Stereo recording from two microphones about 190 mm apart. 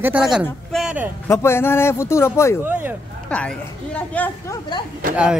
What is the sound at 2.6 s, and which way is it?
Speech, 10° right (ahead or behind).